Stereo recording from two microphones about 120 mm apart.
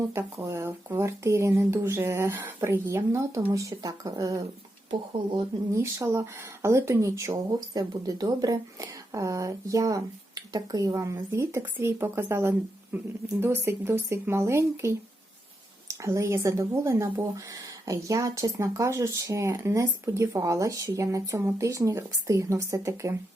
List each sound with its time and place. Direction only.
0.1 s speech: 20° right (ahead or behind)
5.7 s speech: 25° right (ahead or behind)